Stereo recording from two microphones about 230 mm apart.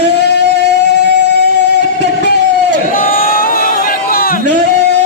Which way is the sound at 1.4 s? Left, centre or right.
Left.